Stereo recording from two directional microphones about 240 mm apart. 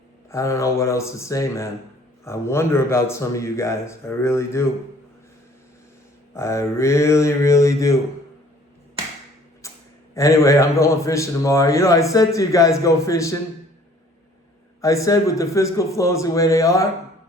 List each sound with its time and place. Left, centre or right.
0.3 s a man's voice: centre
6.3 s a man's voice: centre
9.6 s a sound: centre
10.2 s a man's voice: centre
14.8 s a man's voice: centre